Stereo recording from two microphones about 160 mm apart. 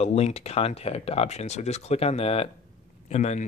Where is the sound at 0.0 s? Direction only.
40° left (ahead or behind).